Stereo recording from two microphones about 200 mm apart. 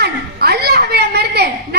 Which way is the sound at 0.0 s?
55° right (ahead or behind).